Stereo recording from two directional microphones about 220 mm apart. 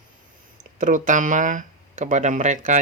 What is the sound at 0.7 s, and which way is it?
Speech, 35° right (ahead or behind).